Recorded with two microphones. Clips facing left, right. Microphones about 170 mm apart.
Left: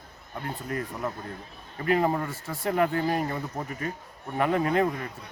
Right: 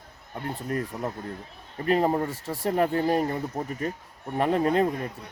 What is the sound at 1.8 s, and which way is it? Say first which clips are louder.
Speech: right 2 dB; 30° right (ahead or behind).